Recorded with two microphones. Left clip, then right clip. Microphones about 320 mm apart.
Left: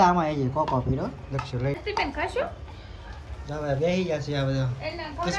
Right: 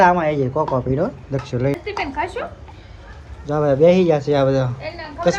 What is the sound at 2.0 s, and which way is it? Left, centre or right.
Speech, centre.